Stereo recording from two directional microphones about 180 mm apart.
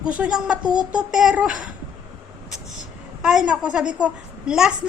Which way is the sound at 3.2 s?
5° right (ahead or behind).